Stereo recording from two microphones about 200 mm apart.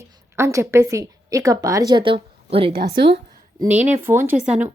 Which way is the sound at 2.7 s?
50° right (ahead or behind).